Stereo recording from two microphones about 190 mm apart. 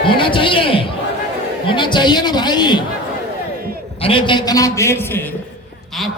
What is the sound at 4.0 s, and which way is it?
A man's voice, 25° left (ahead or behind).